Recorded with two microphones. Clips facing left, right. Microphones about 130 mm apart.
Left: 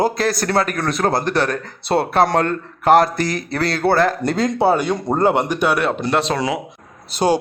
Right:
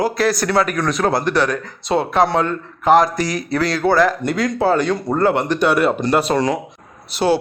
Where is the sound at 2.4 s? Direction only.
60° left (ahead or behind).